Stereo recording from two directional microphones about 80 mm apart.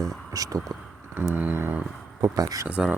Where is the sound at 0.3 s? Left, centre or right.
Right.